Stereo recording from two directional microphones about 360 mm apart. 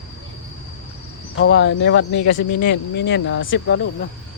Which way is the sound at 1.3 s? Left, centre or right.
Left.